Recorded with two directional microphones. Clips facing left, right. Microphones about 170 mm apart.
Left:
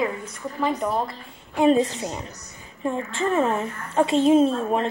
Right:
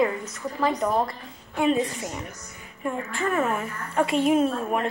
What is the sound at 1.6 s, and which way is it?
A woman's voice, 25° left (ahead or behind).